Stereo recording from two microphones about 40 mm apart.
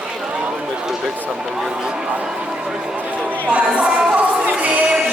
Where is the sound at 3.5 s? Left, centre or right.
Right.